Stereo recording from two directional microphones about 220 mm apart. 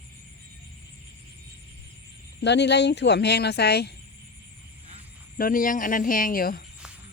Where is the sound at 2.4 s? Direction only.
50° left (ahead or behind).